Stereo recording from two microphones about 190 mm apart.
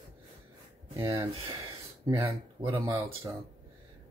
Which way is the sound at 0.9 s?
15° right (ahead or behind).